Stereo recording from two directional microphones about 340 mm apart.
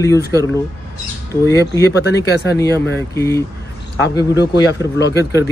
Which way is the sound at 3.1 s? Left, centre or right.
Centre.